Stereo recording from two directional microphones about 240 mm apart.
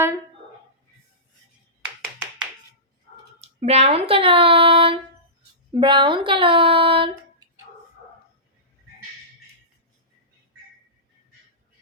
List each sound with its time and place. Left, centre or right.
3.4 s speech: right